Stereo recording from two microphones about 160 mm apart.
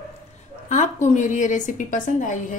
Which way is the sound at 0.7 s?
50° left (ahead or behind).